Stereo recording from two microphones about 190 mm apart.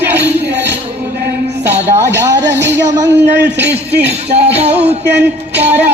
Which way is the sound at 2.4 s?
65° right (ahead or behind).